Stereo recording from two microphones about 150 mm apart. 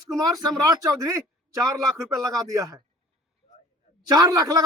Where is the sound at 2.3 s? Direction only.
25° right (ahead or behind).